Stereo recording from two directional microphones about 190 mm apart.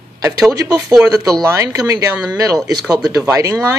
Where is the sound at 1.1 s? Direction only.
15° right (ahead or behind).